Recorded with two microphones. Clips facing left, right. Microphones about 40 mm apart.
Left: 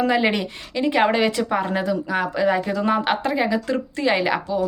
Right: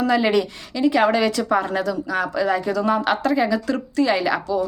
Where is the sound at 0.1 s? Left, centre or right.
Left.